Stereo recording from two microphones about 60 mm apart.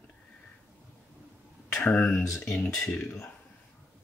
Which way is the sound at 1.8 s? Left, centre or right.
Left.